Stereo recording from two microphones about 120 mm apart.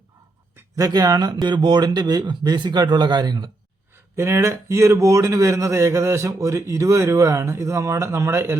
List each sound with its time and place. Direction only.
0.5 s speech: 30° right (ahead or behind)
4.1 s speech: 25° right (ahead or behind)